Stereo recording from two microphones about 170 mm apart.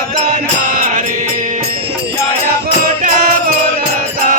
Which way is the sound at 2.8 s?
55° right (ahead or behind).